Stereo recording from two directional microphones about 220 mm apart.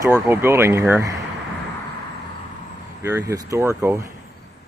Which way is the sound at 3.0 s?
15° right (ahead or behind).